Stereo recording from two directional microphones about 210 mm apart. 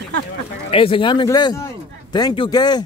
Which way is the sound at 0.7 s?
25° left (ahead or behind).